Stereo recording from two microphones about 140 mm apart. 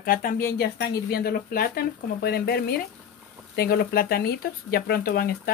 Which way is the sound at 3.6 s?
90° left.